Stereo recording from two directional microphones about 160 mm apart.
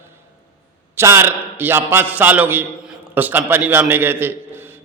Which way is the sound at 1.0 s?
15° right (ahead or behind).